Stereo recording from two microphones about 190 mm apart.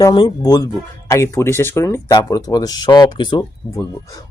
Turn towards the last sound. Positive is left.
turn(degrees=20)  # may be behind; listen again after turning